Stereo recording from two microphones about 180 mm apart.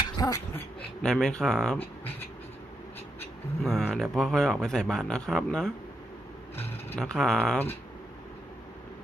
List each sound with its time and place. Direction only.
0.0 s a sound: 20° left (ahead or behind)
1.0 s speech: 5° left (ahead or behind)
3.6 s speech: 5° left (ahead or behind)